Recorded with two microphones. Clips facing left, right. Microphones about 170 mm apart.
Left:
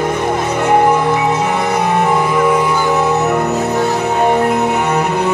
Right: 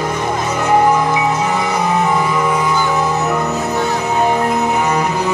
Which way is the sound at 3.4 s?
50° left (ahead or behind).